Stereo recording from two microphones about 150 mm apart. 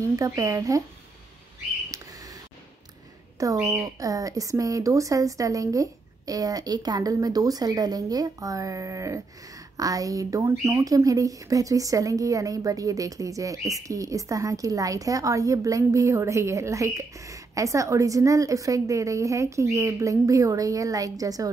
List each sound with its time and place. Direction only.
0.0 s a woman's voice: 20° right (ahead or behind)
1.9 s a sound: 20° right (ahead or behind)
3.6 s a woman's voice: 20° right (ahead or behind)